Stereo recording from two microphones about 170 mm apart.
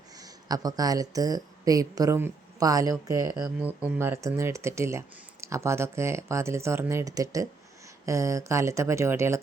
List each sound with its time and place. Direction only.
0.2 s speech: 20° right (ahead or behind)
3.3 s speech: 10° right (ahead or behind)